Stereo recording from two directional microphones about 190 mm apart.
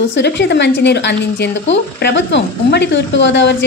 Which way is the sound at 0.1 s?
65° left (ahead or behind).